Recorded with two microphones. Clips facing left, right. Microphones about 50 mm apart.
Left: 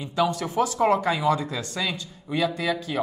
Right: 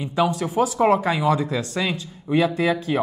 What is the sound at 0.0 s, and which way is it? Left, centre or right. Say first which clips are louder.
Speech: right 3 dB; centre.